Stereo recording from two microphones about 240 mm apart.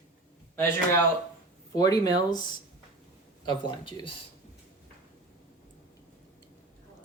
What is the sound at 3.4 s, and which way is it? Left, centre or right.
Speech, centre.